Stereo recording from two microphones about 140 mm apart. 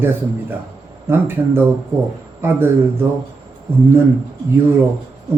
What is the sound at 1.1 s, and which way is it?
A man's voice, 15° right (ahead or behind).